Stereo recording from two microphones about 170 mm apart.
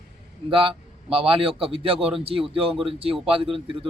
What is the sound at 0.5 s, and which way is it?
A man's voice, 30° right (ahead or behind).